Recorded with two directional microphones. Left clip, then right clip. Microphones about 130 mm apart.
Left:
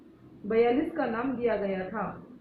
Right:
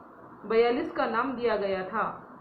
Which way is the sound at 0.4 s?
40° right (ahead or behind).